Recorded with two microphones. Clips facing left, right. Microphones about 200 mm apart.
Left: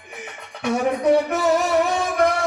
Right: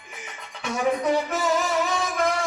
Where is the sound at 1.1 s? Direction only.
60° left (ahead or behind).